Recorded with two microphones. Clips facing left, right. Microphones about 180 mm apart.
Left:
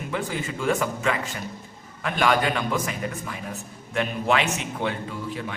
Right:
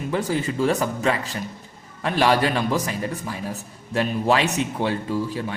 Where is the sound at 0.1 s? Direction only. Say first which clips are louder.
Right 5 dB; 35° right (ahead or behind).